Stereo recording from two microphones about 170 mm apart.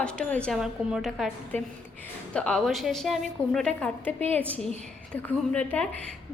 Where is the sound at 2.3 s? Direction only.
5° left (ahead or behind).